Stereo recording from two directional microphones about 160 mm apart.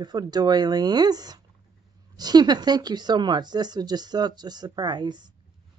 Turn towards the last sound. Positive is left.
turn(degrees=-25)  # may be behind; listen again after turning